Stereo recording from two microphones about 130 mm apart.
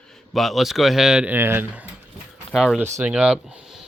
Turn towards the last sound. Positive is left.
turn(degrees=-5)  # may be behind; listen again after turning